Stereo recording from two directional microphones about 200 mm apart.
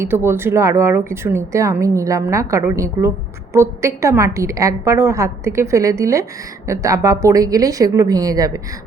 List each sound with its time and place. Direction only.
0.0 s speech: 10° right (ahead or behind)